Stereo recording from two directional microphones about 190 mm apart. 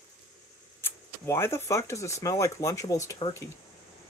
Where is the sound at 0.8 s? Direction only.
10° left (ahead or behind).